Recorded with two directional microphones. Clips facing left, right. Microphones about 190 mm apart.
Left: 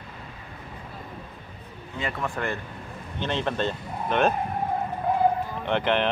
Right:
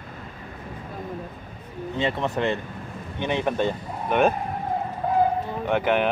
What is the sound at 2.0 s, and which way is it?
Speech, 25° right (ahead or behind).